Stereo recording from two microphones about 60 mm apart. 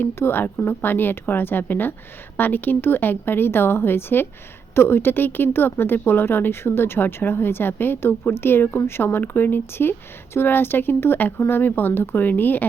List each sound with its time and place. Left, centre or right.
0.0 s speech: left